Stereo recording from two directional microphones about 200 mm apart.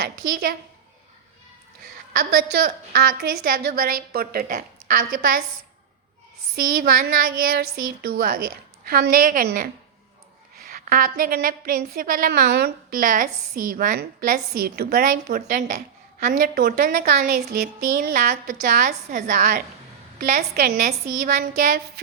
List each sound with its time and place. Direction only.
0.0 s a woman's voice: 50° right (ahead or behind)
2.1 s a woman's voice: 50° right (ahead or behind)
6.6 s a woman's voice: 45° right (ahead or behind)
16.3 s a woman's voice: 50° right (ahead or behind)